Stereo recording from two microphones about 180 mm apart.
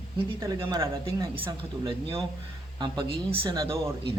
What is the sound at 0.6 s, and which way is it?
Speech, 25° right (ahead or behind).